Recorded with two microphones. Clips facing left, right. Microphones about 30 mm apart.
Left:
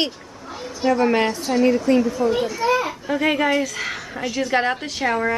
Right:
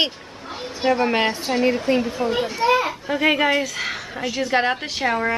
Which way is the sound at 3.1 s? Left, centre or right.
Centre.